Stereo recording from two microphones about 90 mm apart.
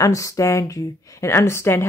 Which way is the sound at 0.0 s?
35° left (ahead or behind).